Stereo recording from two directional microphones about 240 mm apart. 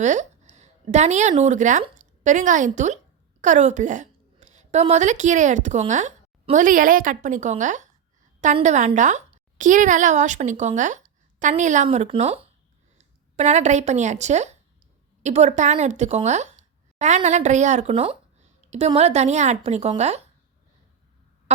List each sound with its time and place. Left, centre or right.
0.0 s a woman's voice: right